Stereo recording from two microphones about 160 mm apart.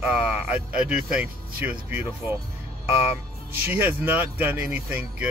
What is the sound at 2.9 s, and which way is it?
Music, 40° left (ahead or behind).